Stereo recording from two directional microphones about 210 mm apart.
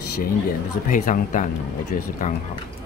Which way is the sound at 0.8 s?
35° left (ahead or behind).